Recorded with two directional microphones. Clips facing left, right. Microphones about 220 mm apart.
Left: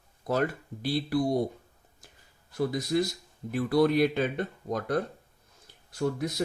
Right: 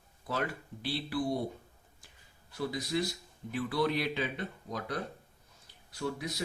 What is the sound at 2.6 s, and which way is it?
Speech, 45° left (ahead or behind).